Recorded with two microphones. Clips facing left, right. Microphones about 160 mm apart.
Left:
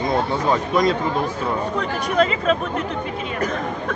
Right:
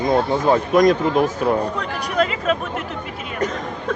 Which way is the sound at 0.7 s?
45° right (ahead or behind).